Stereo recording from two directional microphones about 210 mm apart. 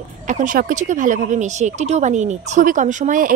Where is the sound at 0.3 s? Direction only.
40° right (ahead or behind).